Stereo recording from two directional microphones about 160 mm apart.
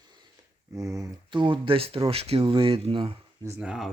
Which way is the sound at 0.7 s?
20° right (ahead or behind).